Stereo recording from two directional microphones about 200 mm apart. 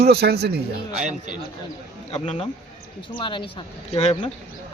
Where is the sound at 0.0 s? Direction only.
55° right (ahead or behind).